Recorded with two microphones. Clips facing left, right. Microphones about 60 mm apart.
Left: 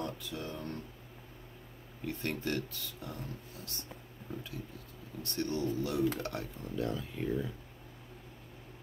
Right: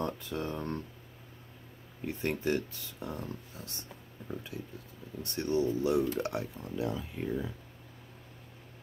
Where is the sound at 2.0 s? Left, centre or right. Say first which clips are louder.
Right 4 dB; right.